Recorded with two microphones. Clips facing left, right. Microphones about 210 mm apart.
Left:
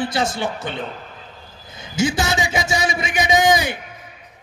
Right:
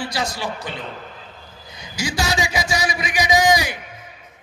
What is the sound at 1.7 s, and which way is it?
A man's voice, 25° left (ahead or behind).